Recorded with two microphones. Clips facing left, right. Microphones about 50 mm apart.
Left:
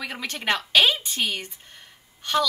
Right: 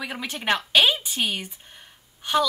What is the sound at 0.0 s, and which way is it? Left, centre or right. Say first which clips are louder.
Speech: even; centre.